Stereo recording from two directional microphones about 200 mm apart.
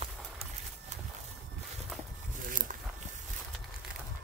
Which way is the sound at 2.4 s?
40° right (ahead or behind).